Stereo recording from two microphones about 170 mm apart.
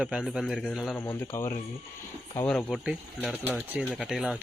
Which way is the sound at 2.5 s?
5° left (ahead or behind).